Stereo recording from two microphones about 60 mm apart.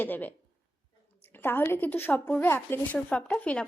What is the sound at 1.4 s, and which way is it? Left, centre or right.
Speech, left.